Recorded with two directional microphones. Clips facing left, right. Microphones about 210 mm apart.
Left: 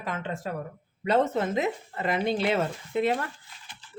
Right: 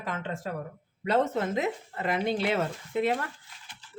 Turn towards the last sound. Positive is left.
turn(degrees=30)  # may be behind; listen again after turning